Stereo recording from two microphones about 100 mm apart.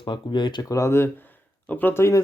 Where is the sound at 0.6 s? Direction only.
35° left (ahead or behind).